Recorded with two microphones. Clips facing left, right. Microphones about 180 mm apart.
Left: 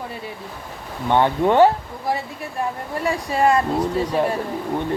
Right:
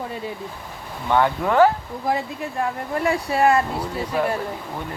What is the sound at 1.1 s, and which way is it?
Speech, 25° left (ahead or behind).